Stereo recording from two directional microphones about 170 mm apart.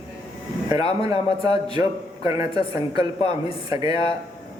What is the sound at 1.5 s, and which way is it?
Speech, 35° left (ahead or behind).